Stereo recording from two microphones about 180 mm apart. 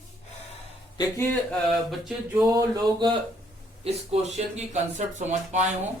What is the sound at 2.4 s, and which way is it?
Speech, 20° right (ahead or behind).